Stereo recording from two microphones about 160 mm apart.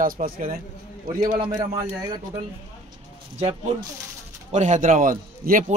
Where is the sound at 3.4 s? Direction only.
40° right (ahead or behind).